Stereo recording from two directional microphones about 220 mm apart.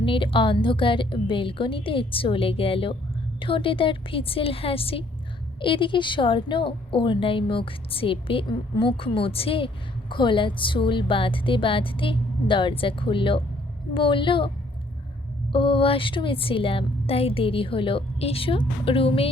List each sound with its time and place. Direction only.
0.0 s a woman's voice: 25° left (ahead or behind)